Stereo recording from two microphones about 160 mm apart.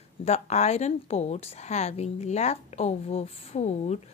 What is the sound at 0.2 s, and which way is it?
Speech, 45° left (ahead or behind).